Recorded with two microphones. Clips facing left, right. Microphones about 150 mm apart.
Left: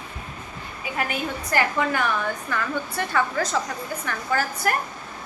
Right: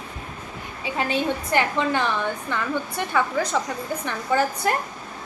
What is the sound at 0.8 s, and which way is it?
A woman's voice, 25° right (ahead or behind).